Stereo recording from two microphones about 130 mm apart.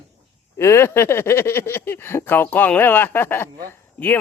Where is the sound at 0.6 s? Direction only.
20° left (ahead or behind).